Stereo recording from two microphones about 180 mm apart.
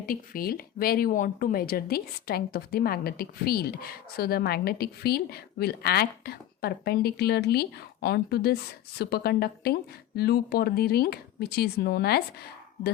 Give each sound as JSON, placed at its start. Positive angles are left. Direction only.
{"t": 0.0, "sound": "speech", "side_deg": 55}